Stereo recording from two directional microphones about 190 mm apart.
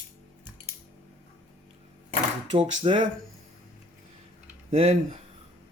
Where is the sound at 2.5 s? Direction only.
25° right (ahead or behind).